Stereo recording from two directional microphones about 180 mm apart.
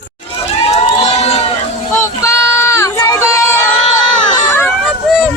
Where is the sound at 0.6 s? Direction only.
35° left (ahead or behind).